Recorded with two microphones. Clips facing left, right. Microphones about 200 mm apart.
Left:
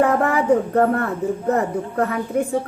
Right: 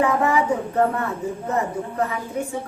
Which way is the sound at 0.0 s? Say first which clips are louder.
Left 3 dB; 60° left (ahead or behind).